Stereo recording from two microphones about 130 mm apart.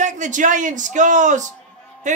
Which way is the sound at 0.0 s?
70° right (ahead or behind).